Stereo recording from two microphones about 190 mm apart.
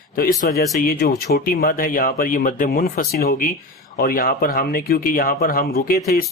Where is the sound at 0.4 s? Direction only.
50° left (ahead or behind).